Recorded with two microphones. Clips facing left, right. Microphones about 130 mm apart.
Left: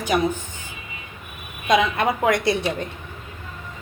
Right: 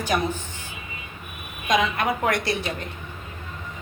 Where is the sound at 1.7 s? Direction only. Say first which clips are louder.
Left 3 dB; 25° left (ahead or behind).